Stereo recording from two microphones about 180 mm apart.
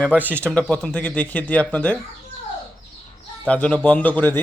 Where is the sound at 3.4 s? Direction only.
5° left (ahead or behind).